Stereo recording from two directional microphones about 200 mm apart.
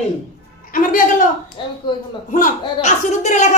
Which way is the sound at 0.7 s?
45° left (ahead or behind).